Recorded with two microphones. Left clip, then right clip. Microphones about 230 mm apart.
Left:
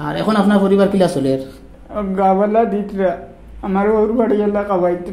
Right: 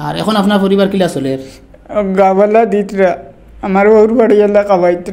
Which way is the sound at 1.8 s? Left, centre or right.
Right.